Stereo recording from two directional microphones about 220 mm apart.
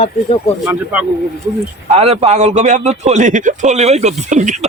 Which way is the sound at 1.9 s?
25° right (ahead or behind).